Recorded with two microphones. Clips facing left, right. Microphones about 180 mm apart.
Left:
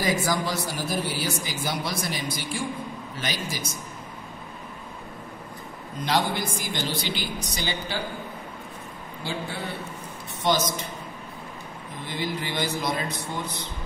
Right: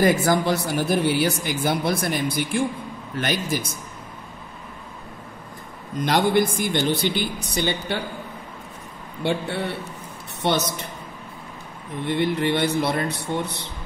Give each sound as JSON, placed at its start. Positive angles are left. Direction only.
{"t": 0.0, "sound": "speech", "side_deg": -60}
{"t": 6.0, "sound": "speech", "side_deg": -55}
{"t": 9.2, "sound": "speech", "side_deg": -65}
{"t": 12.0, "sound": "a man's voice", "side_deg": -65}